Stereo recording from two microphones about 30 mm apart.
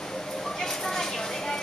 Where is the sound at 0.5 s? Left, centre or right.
Centre.